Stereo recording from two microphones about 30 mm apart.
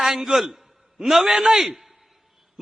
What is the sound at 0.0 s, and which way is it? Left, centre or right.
A man's voice, centre.